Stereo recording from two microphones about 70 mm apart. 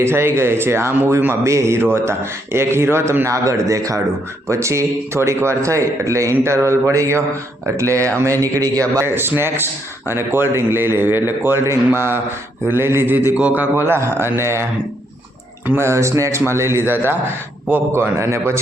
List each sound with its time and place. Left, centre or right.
0.0 s a man's voice: right
9.0 s a man's voice: right
15.8 s a man's voice: right